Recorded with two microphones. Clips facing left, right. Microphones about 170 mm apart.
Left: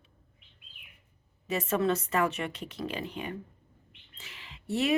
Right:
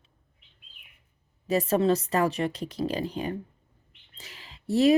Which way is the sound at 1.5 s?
35° right (ahead or behind).